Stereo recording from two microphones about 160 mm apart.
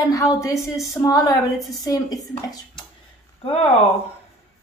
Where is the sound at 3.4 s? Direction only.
40° left (ahead or behind).